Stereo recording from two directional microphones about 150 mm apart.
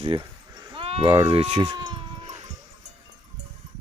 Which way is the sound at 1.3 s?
40° right (ahead or behind).